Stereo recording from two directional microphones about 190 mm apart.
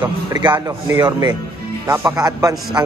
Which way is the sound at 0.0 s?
25° right (ahead or behind).